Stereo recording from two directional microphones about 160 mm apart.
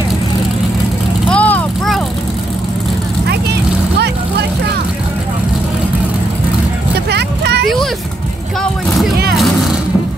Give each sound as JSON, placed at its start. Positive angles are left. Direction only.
{"t": 1.3, "sound": "vehicle", "side_deg": 10}
{"t": 7.1, "sound": "vehicle", "side_deg": -90}
{"t": 9.3, "sound": "music", "side_deg": 0}